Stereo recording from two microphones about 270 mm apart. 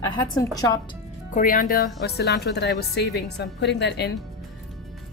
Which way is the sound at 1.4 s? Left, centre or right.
Left.